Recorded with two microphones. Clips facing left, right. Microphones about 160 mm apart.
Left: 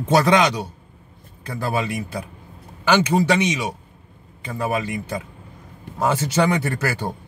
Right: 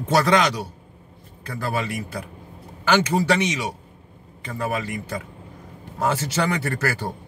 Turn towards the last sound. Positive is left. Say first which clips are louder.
# left 1 dB
turn(degrees=20)  # may be behind; listen again after turning